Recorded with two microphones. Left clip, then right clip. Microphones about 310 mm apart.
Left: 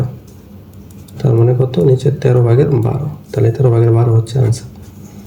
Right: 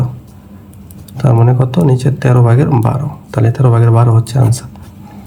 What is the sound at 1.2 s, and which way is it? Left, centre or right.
Speech, centre.